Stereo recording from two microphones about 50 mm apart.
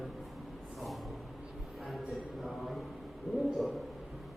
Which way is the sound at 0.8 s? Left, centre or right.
Centre.